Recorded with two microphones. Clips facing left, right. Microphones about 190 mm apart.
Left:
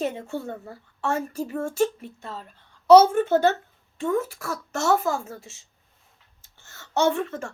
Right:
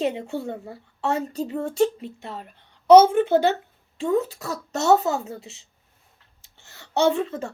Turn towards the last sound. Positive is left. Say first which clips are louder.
# right 2 dB
turn(degrees=-20)  # may be behind; listen again after turning